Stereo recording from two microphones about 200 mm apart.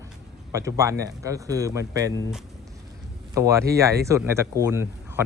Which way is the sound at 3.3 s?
15° right (ahead or behind).